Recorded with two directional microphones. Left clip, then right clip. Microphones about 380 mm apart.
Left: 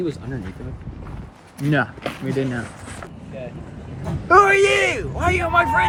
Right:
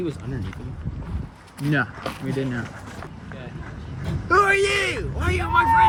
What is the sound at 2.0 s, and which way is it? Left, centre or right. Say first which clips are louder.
Speech: left 2 dB; centre.